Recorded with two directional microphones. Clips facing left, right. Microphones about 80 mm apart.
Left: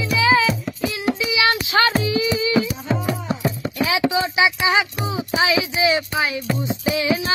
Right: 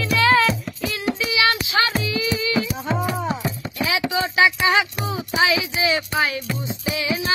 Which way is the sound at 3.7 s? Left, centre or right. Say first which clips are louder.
Left 2 dB; left.